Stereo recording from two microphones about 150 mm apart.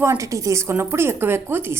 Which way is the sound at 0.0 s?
20° right (ahead or behind).